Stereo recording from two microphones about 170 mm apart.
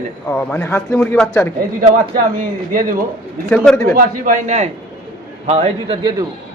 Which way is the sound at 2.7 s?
55° right (ahead or behind).